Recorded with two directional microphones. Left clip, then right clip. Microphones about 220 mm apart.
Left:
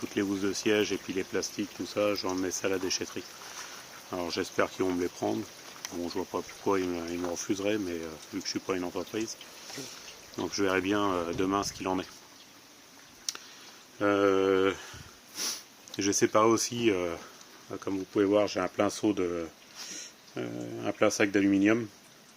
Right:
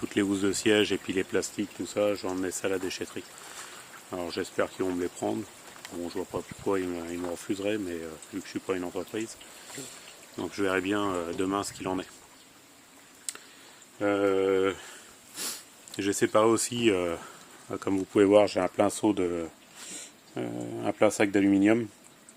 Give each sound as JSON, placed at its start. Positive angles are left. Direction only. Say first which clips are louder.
{"t": 0.1, "sound": "speech", "louder": "right 3 dB", "side_deg": -35}
{"t": 2.0, "sound": "speech", "louder": "right 1 dB", "side_deg": -10}
{"t": 10.3, "sound": "speech", "louder": "even", "side_deg": 0}
{"t": 14.0, "sound": "speech", "louder": "even", "side_deg": 5}
{"t": 17.7, "sound": "speech", "louder": "right 5 dB", "side_deg": -45}
{"t": 18.3, "sound": "speech", "louder": "right 5 dB", "side_deg": -25}